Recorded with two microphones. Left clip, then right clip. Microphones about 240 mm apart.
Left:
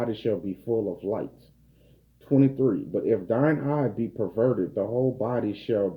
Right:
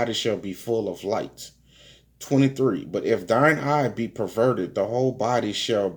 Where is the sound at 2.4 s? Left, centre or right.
Centre.